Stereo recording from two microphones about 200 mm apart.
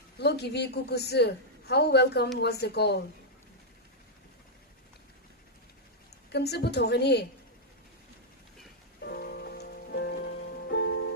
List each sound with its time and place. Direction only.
0.2 s a woman's voice: 55° left (ahead or behind)
6.3 s a woman's voice: 55° left (ahead or behind)
9.0 s rain on surface: 50° left (ahead or behind)